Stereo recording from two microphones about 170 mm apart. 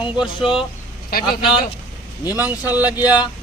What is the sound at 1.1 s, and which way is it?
Speech, 60° left (ahead or behind).